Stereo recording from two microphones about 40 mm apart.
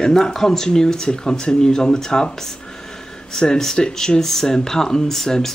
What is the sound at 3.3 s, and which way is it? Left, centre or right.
Speech, centre.